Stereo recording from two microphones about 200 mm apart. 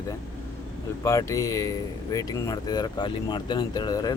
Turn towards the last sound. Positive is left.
turn(degrees=20)  # may be behind; listen again after turning